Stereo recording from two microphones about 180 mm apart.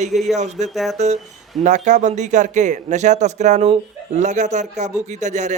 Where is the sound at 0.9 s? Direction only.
40° right (ahead or behind).